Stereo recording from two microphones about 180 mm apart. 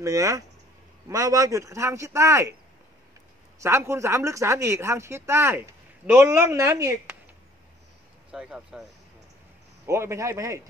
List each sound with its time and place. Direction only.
0.0 s speech: 20° right (ahead or behind)
3.5 s speech: 15° right (ahead or behind)
8.3 s speech: 5° right (ahead or behind)
9.8 s speech: 15° right (ahead or behind)